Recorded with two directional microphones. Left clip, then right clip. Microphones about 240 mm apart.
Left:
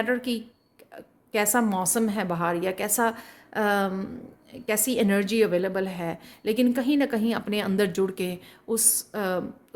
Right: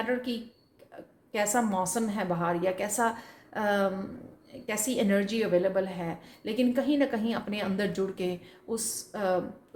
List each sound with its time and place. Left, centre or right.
0.0 s a woman's voice: left